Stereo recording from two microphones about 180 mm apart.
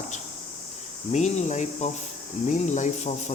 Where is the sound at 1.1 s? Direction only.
40° left (ahead or behind).